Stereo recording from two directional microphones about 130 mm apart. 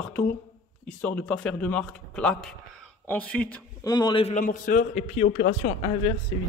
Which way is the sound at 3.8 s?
30° left (ahead or behind).